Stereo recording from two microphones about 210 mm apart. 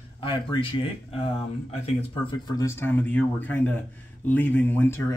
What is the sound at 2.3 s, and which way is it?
Speech, 20° left (ahead or behind).